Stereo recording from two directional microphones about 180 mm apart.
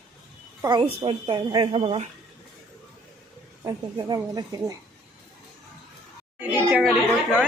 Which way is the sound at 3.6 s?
20° right (ahead or behind).